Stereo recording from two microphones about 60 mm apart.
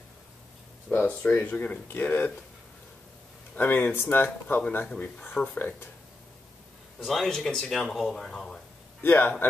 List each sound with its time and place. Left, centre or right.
0.9 s speech: left
3.5 s speech: left
7.0 s a man's voice: centre
7.9 s speech: centre
9.0 s speech: left